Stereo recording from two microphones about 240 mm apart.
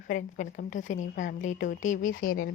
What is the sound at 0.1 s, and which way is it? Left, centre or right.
A woman's voice, left.